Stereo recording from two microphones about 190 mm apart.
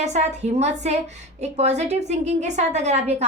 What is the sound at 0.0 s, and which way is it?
A woman's voice, 40° right (ahead or behind).